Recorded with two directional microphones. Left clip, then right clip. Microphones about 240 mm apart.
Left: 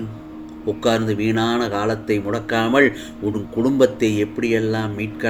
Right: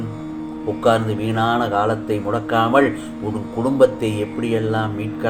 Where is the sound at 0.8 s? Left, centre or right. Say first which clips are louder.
Right 2 dB; left.